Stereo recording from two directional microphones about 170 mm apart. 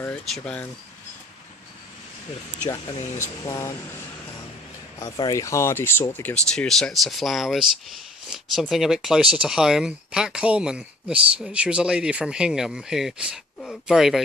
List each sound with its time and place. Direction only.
0.0 s speech: 5° left (ahead or behind)
3.4 s speech: 20° left (ahead or behind)
5.1 s speech: 25° left (ahead or behind); by 14.2 s centre (ahead or behind)